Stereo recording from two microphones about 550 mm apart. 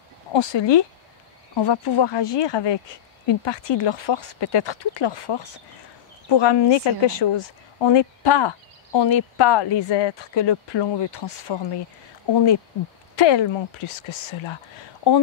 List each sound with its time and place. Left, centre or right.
0.3 s speech: left